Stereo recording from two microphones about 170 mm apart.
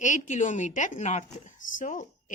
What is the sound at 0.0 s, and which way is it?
A woman's voice, 45° left (ahead or behind).